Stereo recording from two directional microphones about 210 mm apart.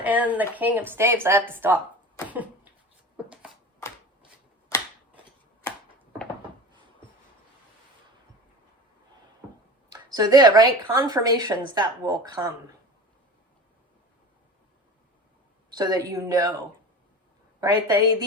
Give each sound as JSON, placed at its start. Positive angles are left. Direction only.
{"t": 0.0, "sound": "speech", "side_deg": -5}
{"t": 9.9, "sound": "speech", "side_deg": -20}
{"t": 15.7, "sound": "speech", "side_deg": -20}
{"t": 17.6, "sound": "speech", "side_deg": -15}